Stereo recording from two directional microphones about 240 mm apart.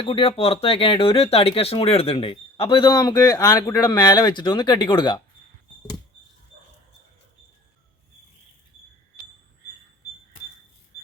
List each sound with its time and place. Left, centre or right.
0.0 s speech: left